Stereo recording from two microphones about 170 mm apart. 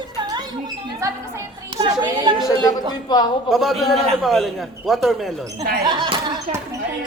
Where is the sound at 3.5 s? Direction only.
Centre (ahead or behind).